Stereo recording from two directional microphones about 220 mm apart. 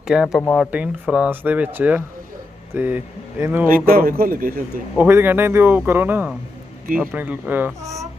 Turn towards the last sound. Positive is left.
turn(degrees=-10)  # may be behind; listen again after turning